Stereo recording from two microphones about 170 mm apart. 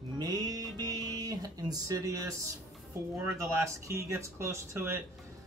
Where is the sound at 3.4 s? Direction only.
15° right (ahead or behind).